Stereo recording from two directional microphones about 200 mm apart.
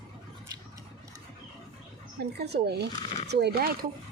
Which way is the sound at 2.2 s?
55° right (ahead or behind).